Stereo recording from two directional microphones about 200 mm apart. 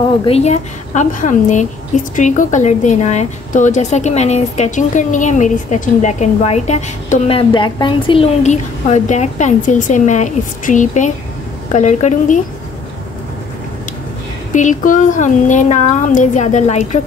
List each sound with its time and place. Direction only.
0.2 s a woman's voice: 30° left (ahead or behind)
14.5 s a woman's voice: 40° left (ahead or behind)